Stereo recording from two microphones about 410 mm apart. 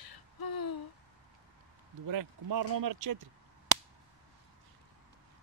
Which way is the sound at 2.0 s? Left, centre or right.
Right.